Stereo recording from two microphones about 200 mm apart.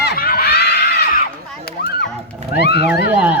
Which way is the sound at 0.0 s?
50° left (ahead or behind).